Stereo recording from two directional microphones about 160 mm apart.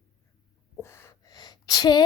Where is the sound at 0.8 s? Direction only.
15° left (ahead or behind).